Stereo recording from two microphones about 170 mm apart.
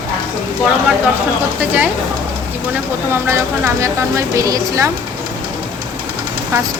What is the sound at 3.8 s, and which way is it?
Speech, 20° right (ahead or behind).